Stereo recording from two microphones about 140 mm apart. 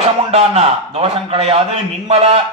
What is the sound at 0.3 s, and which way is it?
A man's voice, 45° right (ahead or behind).